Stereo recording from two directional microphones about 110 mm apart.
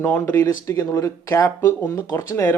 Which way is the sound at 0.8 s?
30° left (ahead or behind).